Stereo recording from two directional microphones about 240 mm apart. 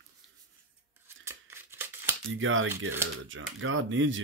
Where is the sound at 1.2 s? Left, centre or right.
Centre.